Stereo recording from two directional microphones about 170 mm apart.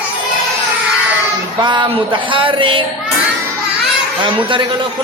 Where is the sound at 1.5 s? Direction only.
25° right (ahead or behind).